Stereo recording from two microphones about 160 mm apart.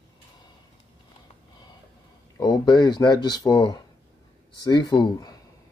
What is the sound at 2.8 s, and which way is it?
Speech, 25° left (ahead or behind).